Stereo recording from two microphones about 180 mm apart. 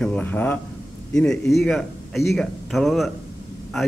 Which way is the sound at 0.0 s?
10° left (ahead or behind).